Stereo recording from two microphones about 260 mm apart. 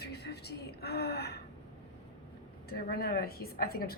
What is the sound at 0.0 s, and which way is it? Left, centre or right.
Gasp, left.